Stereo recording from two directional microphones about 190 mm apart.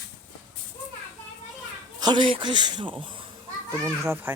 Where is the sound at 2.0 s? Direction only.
25° right (ahead or behind).